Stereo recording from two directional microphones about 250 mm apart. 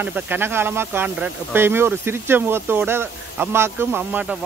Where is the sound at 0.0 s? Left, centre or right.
Centre.